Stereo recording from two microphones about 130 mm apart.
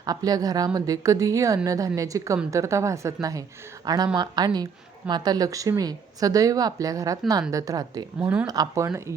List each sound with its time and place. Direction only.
0.0 s a woman's voice: 30° right (ahead or behind)
8.2 s speech: 10° right (ahead or behind)
8.4 s a woman's voice: 25° right (ahead or behind)